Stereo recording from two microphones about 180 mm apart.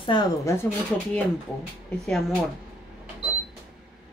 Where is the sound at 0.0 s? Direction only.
25° left (ahead or behind).